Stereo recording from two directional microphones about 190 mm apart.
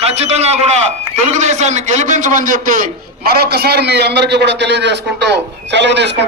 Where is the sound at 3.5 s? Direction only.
60° right (ahead or behind).